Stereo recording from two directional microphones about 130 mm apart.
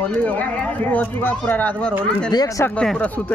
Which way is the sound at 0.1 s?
10° left (ahead or behind).